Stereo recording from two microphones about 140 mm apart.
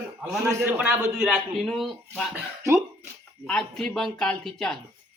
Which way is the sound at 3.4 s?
5° left (ahead or behind).